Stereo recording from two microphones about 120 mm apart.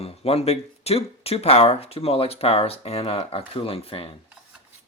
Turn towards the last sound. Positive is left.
turn(degrees=50)  # may be behind; listen again after turning